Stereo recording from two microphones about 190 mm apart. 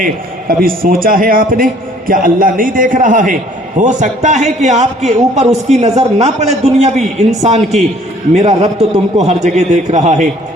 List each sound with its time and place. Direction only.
0.0 s a man's voice: 50° right (ahead or behind)